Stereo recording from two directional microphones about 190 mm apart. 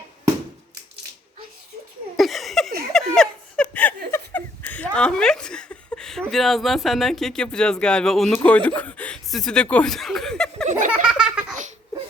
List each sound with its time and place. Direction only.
2.1 s a sound: centre (ahead or behind)
2.9 s laughter: 5° left (ahead or behind)
6.3 s speech: centre (ahead or behind)
10.7 s laughter: 40° right (ahead or behind)
11.0 s baby laughter: 5° right (ahead or behind)